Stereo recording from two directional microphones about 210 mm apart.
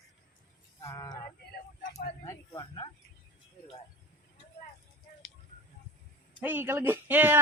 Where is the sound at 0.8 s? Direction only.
20° left (ahead or behind).